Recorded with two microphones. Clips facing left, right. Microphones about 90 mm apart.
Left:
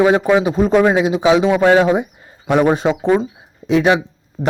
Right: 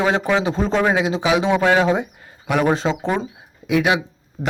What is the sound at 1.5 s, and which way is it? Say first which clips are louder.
A man's voice: left 4 dB; 20° left (ahead or behind).